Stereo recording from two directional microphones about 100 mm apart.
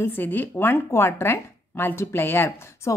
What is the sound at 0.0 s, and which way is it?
Speech, 20° left (ahead or behind).